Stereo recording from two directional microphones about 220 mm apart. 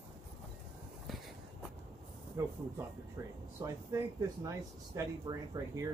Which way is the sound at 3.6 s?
15° right (ahead or behind).